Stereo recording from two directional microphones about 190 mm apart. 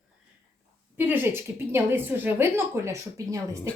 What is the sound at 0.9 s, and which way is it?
A woman's voice, 10° right (ahead or behind).